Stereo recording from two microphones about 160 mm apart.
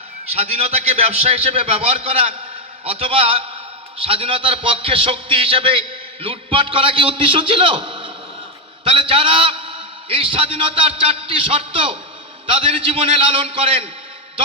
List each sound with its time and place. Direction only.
0.3 s a man's voice: 40° right (ahead or behind)